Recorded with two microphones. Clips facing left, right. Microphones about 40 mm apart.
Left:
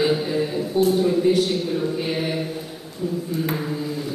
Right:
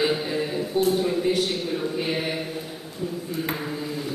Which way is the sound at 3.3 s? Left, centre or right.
Right.